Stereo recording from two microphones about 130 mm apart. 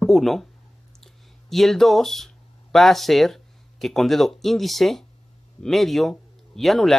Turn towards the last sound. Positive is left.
turn(degrees=0)  # may be behind; listen again after turning